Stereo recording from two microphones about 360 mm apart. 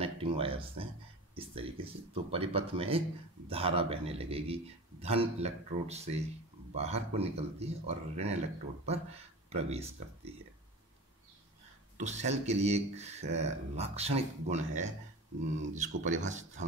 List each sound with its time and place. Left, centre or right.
0.0 s a sound: centre
1.3 s speech: centre
12.0 s speech: centre